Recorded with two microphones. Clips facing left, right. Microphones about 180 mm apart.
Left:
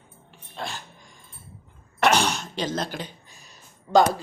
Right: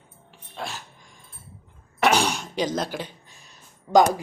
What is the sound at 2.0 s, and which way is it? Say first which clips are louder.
Cough: even; 5° right (ahead or behind).